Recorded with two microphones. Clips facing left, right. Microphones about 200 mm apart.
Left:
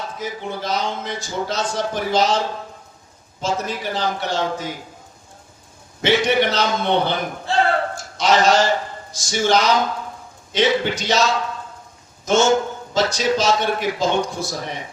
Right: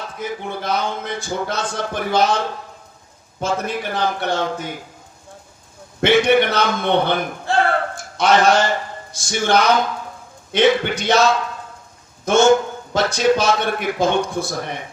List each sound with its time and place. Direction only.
0.2 s a man's voice: 55° right (ahead or behind)
3.4 s a man's voice: 55° right (ahead or behind)
6.0 s a man's voice: 55° right (ahead or behind)